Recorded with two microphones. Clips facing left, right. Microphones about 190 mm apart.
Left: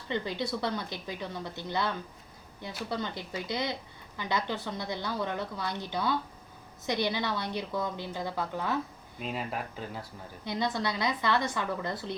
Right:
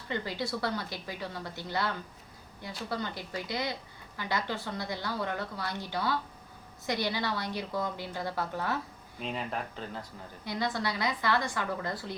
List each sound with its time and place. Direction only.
0.1 s a woman's voice: 20° left (ahead or behind)
2.9 s a woman's voice: 20° left (ahead or behind)
9.2 s speech: 5° left (ahead or behind)
10.4 s a woman's voice: 20° left (ahead or behind)